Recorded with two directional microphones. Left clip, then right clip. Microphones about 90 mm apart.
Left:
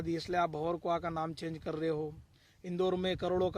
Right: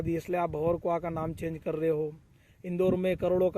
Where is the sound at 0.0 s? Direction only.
35° left (ahead or behind).